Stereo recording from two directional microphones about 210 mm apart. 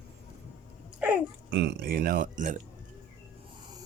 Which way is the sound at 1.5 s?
55° right (ahead or behind).